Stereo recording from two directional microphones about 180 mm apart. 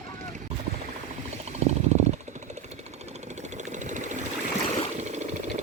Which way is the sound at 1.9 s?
35° right (ahead or behind).